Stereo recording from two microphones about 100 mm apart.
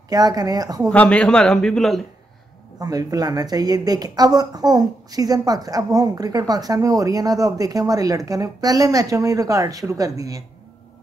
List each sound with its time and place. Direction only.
0.1 s speech: 40° right (ahead or behind)
0.8 s a man's voice: 10° left (ahead or behind)
2.8 s speech: 35° right (ahead or behind)